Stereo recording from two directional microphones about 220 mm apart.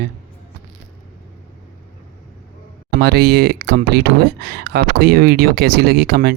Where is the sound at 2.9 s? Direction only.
45° right (ahead or behind).